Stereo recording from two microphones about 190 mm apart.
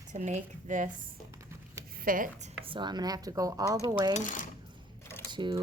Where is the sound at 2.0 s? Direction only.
45° right (ahead or behind).